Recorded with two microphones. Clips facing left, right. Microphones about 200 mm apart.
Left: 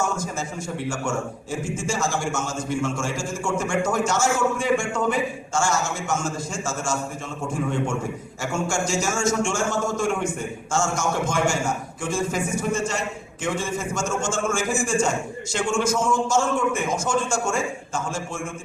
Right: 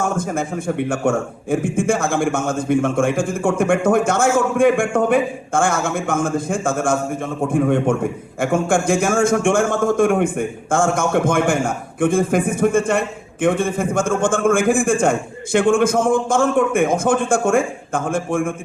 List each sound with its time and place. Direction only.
0.0 s a man's voice: 55° right (ahead or behind)